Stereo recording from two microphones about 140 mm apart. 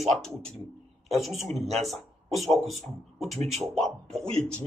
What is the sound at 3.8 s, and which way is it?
Speech, 5° left (ahead or behind).